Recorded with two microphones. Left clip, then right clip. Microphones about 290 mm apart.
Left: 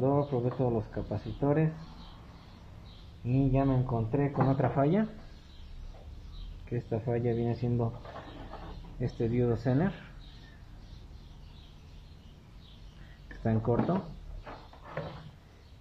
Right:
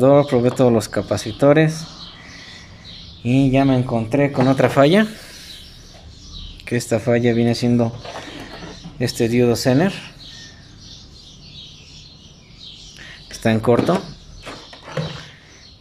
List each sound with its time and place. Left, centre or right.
0.0 s speech: right
3.3 s speech: right
6.6 s speech: right
9.0 s speech: right
13.4 s speech: right